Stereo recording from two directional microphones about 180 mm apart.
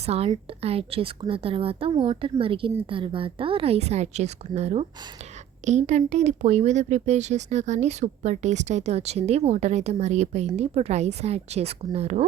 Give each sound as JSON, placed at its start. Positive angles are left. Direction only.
{"t": 0.0, "sound": "speech", "side_deg": -35}